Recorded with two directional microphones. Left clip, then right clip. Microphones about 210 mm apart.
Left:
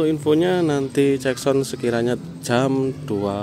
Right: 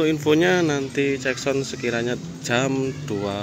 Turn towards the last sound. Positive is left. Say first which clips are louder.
# left 3 dB
turn(degrees=15)  # may be behind; listen again after turning